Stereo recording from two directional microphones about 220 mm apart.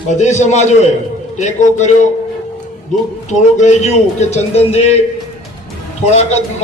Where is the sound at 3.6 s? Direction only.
30° left (ahead or behind).